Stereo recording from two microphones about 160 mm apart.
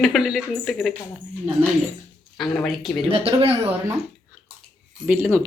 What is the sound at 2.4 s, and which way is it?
Speech, centre (ahead or behind).